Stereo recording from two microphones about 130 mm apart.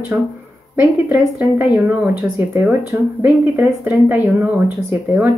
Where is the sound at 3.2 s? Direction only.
15° right (ahead or behind).